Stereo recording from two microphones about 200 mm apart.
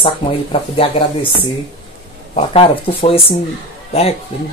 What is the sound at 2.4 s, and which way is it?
Speech, 30° left (ahead or behind).